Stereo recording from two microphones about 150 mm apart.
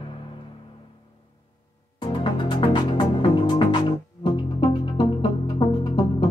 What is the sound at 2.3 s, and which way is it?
Music, 35° left (ahead or behind).